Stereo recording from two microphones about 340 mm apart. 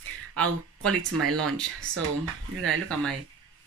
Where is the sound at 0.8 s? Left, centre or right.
Right.